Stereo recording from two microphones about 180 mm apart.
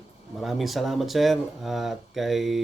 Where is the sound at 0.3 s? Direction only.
Centre (ahead or behind).